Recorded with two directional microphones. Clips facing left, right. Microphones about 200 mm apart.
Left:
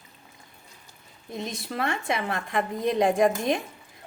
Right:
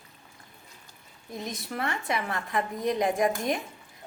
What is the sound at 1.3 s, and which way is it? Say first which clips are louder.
Speech: left 2 dB; 25° left (ahead or behind).